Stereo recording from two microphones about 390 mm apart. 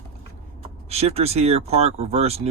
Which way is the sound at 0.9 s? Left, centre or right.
Centre.